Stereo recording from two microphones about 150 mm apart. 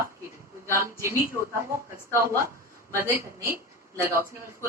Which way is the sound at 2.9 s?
15° right (ahead or behind).